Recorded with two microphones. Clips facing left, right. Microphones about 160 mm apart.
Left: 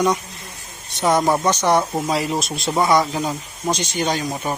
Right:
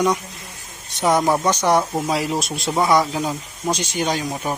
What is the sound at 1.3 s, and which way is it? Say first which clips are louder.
A man's voice: even; 10° right (ahead or behind).